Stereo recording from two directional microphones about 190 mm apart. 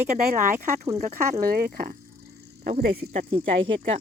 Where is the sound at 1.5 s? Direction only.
55° right (ahead or behind).